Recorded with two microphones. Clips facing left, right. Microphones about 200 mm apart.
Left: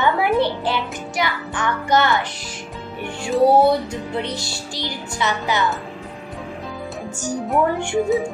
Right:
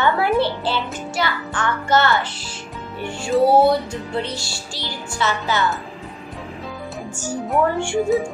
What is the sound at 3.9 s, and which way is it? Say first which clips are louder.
Speech: even; 20° left (ahead or behind).